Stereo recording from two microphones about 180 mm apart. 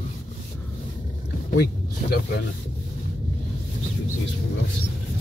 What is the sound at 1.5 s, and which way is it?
Speech, 60° left (ahead or behind).